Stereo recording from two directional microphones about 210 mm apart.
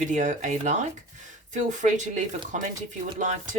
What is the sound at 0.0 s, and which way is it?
Speech, 35° right (ahead or behind).